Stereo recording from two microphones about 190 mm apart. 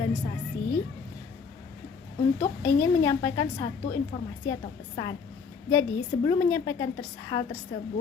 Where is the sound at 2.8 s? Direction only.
20° left (ahead or behind).